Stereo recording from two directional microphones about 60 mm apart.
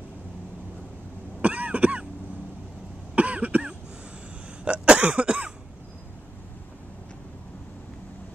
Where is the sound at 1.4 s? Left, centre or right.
Right.